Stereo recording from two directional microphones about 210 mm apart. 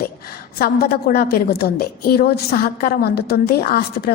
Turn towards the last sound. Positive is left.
turn(degrees=45)  # may be behind; listen again after turning